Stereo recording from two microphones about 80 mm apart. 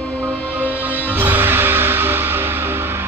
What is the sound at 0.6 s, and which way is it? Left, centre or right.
Music, right.